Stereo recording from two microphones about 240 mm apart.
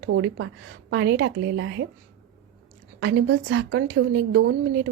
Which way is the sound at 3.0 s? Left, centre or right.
Right.